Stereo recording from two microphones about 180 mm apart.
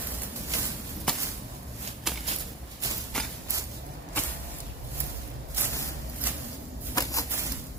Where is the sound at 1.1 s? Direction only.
5° left (ahead or behind).